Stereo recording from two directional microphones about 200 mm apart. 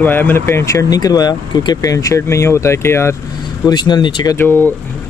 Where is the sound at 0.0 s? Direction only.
10° left (ahead or behind).